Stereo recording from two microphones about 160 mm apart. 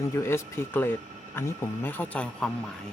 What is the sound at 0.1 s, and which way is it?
Speech, 15° left (ahead or behind).